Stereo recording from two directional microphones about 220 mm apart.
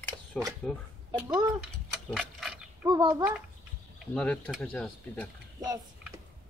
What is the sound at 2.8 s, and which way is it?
Speech, 15° right (ahead or behind).